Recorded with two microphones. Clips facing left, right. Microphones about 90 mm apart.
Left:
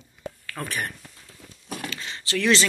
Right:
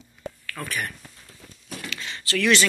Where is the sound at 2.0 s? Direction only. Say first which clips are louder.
Right 2 dB; 25° left (ahead or behind).